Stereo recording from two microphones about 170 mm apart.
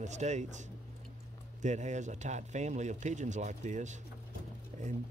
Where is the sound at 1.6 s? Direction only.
45° right (ahead or behind).